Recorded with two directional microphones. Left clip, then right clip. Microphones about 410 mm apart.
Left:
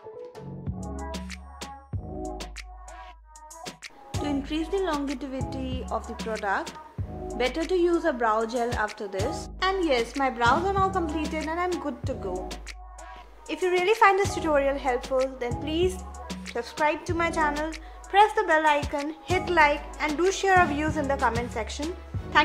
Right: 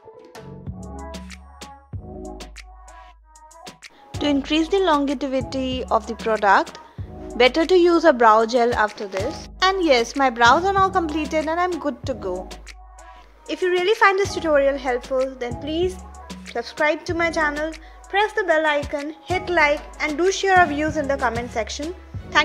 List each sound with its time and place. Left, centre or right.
0.4 s music: centre
4.2 s speech: centre
4.9 s a woman's voice: centre
5.2 s speech: centre
7.3 s speech: centre
8.8 s a woman's voice: centre
9.8 s a woman's voice: centre
13.5 s a woman's voice: centre